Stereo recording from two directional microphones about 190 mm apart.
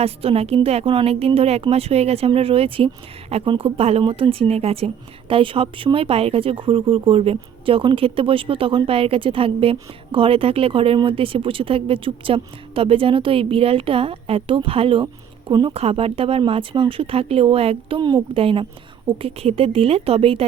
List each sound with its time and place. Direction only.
0.0 s a woman's voice: 30° right (ahead or behind)